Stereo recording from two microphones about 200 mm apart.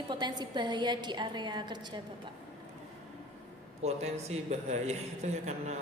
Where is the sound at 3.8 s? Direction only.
30° right (ahead or behind).